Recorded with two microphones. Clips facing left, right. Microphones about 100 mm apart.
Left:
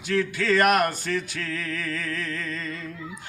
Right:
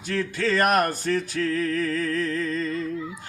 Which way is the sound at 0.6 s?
35° right (ahead or behind).